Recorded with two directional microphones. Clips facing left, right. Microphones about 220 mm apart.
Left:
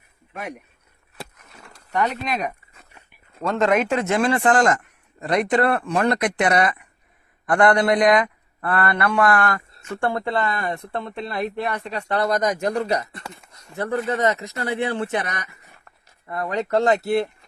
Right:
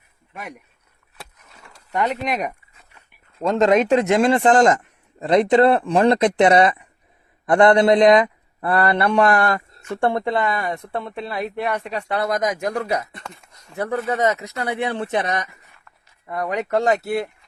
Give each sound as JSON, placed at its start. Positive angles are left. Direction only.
{"t": 3.4, "sound": "a man's voice", "side_deg": -20}